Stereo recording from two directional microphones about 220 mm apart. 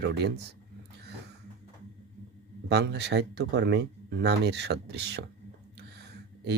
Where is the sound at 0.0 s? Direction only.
50° right (ahead or behind).